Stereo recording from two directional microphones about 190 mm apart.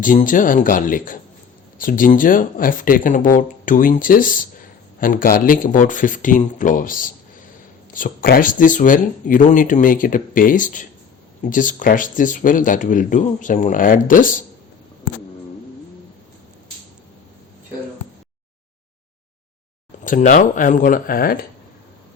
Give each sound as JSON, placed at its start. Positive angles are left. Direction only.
{"t": 0.0, "sound": "speech", "side_deg": 45}
{"t": 20.1, "sound": "speech", "side_deg": 40}